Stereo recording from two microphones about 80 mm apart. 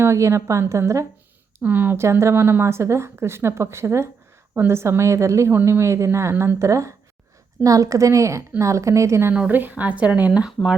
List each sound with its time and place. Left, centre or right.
0.0 s speech: right
1.6 s speech: right
9.3 s speech: centre